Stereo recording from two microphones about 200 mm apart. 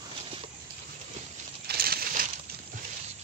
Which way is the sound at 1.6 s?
50° right (ahead or behind).